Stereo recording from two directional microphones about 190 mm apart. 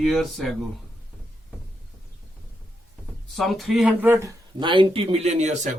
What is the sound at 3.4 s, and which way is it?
Speech, centre (ahead or behind).